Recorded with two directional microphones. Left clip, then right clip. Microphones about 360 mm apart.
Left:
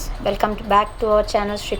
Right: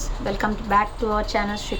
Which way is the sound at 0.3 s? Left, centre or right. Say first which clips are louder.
Left 5 dB; centre.